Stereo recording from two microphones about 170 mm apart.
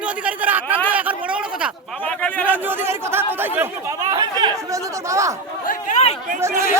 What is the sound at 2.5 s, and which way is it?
Speech, 15° right (ahead or behind).